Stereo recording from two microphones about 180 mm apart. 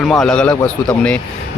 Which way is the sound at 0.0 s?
Centre (ahead or behind).